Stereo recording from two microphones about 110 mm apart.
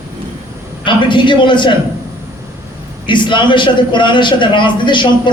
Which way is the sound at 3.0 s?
45° left (ahead or behind).